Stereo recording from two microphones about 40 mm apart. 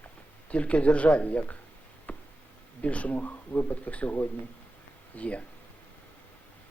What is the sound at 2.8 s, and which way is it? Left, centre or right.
A man's voice, left.